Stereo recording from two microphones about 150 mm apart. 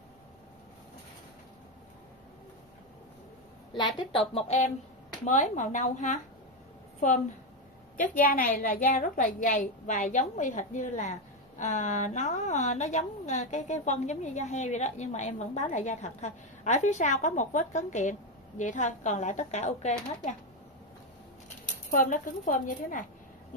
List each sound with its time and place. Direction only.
4.1 s a woman's voice: 40° left (ahead or behind)
8.0 s a woman's voice: 65° left (ahead or behind)
21.6 s speech: 60° left (ahead or behind)